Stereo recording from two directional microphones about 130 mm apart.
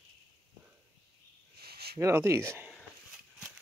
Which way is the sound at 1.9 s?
20° right (ahead or behind).